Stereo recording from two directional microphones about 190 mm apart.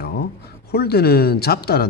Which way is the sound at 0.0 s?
55° left (ahead or behind).